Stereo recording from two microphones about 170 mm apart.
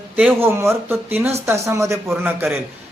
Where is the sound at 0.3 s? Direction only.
15° right (ahead or behind).